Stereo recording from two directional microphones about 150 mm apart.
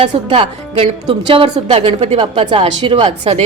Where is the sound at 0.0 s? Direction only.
35° right (ahead or behind).